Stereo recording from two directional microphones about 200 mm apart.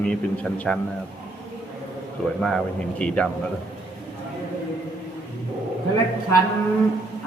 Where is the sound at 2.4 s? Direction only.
Centre (ahead or behind).